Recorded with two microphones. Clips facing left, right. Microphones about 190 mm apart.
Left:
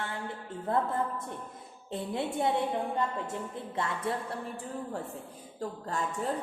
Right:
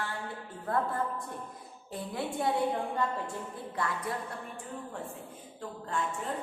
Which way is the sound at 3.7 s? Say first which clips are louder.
Left 2 dB; 25° left (ahead or behind).